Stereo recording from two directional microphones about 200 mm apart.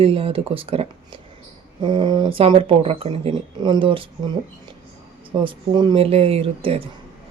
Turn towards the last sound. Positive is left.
turn(degrees=-30)  # may be behind; listen again after turning